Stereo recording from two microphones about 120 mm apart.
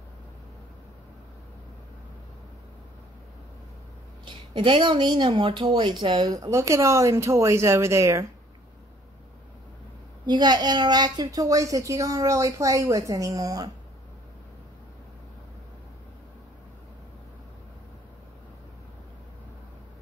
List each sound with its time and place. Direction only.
4.2 s a woman's voice: 45° right (ahead or behind)
6.3 s a woman's voice: 30° right (ahead or behind)
10.2 s a woman's voice: 35° right (ahead or behind)